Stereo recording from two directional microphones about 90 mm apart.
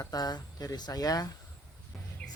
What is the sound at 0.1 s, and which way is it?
A man's voice, 45° left (ahead or behind).